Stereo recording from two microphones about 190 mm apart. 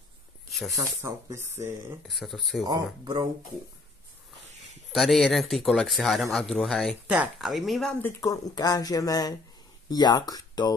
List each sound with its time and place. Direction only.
1.0 s speech: 15° right (ahead or behind)
2.0 s speech: centre (ahead or behind)
2.6 s speech: 20° right (ahead or behind)
4.9 s speech: centre (ahead or behind)
8.2 s speech: 20° left (ahead or behind)